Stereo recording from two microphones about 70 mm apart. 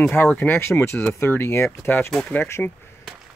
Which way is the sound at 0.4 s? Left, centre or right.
Left.